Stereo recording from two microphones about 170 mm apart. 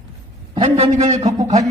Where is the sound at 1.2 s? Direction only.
20° right (ahead or behind).